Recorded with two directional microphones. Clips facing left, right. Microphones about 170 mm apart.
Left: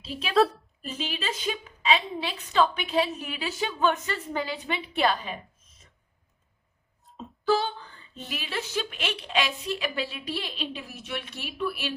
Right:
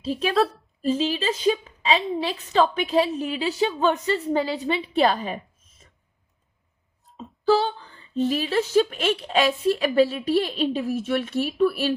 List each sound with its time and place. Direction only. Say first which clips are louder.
0.3 s a woman's voice: left 2 dB; centre (ahead or behind)
0.8 s a woman's voice: right 11 dB; 35° right (ahead or behind)
7.0 s a sound: right 2 dB; centre (ahead or behind)
7.4 s a woman's voice: right 5 dB; 35° right (ahead or behind)